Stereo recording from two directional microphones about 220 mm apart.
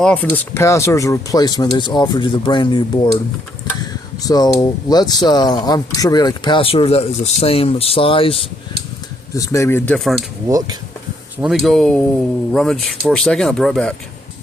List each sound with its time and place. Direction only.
0.0 s speech: 5° left (ahead or behind); by 3.1 s 20° left (ahead or behind)
4.2 s speech: 15° left (ahead or behind)
9.3 s speech: 15° left (ahead or behind)
11.3 s speech: centre (ahead or behind)